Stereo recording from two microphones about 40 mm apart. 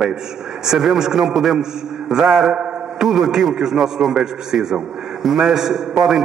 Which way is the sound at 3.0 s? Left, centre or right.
Centre.